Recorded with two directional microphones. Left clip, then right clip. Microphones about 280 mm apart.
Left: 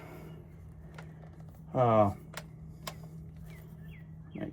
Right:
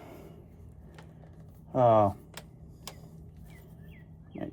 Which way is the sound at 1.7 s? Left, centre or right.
Centre.